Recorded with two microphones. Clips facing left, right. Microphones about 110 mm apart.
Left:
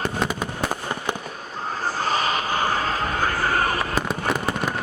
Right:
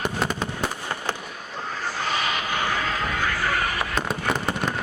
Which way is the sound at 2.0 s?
40° left (ahead or behind).